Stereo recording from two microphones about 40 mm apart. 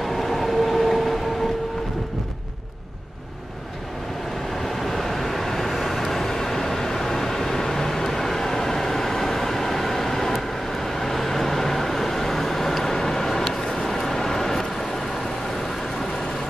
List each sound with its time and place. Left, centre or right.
0.0 s train: centre
4.6 s vehicle: centre